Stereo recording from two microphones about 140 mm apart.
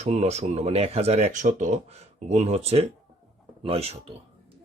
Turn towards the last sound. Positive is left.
turn(degrees=-45)  # may be behind; listen again after turning